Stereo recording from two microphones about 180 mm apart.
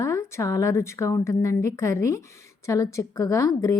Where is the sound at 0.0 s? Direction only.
15° left (ahead or behind).